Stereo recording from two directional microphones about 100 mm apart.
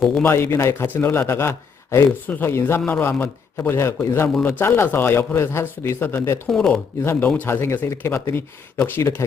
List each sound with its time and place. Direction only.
0.2 s speech: 25° left (ahead or behind)
6.5 s speech: 5° left (ahead or behind)
7.0 s speech: 20° left (ahead or behind)